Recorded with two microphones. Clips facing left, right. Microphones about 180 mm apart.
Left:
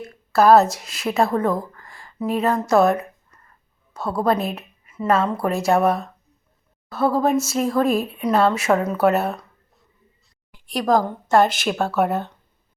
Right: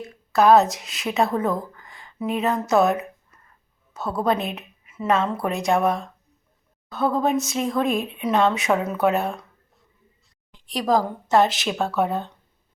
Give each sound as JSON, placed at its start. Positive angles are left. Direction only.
{"t": 0.3, "sound": "a woman's voice", "side_deg": 0}
{"t": 10.5, "sound": "a woman's voice", "side_deg": 0}